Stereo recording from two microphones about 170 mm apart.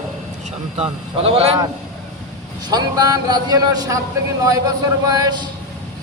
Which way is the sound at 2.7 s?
25° right (ahead or behind).